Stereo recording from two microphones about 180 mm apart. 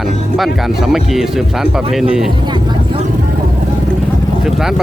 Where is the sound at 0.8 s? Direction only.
Centre (ahead or behind).